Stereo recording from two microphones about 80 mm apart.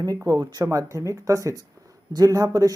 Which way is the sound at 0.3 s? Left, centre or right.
Right.